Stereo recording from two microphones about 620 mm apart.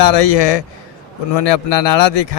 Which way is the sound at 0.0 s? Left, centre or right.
Left.